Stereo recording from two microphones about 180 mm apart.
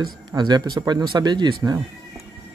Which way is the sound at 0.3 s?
25° right (ahead or behind).